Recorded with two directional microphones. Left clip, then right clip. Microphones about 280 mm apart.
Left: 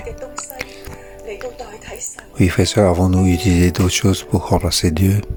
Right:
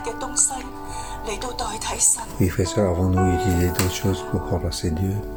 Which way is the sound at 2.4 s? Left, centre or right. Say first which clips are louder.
Left 8 dB; left.